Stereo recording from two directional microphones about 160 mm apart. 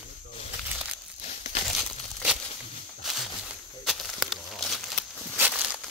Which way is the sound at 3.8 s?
Centre (ahead or behind).